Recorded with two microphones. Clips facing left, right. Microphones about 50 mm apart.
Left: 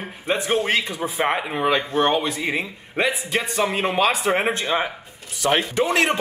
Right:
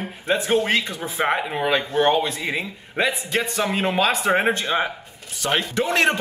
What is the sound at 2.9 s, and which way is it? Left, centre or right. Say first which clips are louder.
Speech: even; centre.